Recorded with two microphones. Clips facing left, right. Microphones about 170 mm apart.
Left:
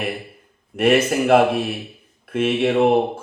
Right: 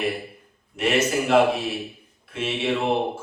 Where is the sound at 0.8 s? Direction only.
55° left (ahead or behind).